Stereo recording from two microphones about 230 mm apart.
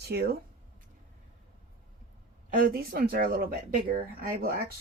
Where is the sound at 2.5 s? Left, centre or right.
Right.